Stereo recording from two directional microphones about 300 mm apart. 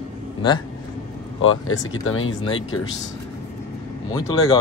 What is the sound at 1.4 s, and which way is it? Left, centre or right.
Speech, left.